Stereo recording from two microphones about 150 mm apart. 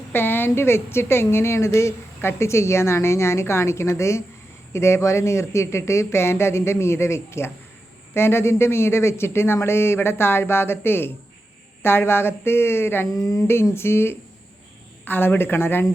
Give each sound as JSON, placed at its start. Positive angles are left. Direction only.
{"t": 0.1, "sound": "a woman's voice", "side_deg": 15}